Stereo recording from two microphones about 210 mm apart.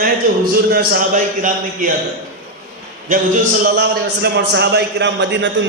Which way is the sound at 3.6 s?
50° right (ahead or behind).